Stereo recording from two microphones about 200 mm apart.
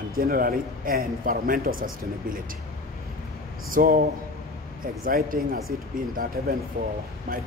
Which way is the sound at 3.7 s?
45° right (ahead or behind).